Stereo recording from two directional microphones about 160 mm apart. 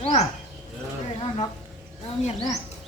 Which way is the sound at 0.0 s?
45° left (ahead or behind).